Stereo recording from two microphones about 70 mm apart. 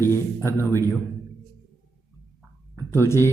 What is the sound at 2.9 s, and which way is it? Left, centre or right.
Speech, left.